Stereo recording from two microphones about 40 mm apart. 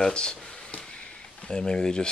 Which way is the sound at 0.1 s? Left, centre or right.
Left.